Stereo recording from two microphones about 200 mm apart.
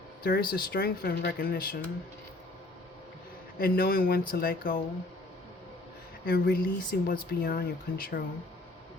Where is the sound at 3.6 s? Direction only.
50° left (ahead or behind).